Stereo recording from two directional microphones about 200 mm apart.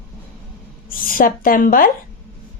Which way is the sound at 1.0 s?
45° left (ahead or behind).